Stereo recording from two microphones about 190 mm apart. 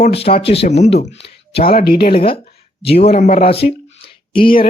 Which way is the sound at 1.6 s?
50° left (ahead or behind).